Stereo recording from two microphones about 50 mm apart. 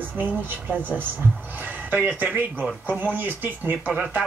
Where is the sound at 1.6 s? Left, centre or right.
Right.